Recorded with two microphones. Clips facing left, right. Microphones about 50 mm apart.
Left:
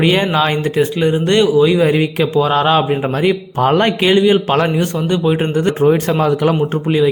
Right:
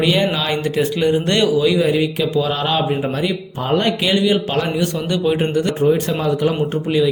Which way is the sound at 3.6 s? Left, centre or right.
Left.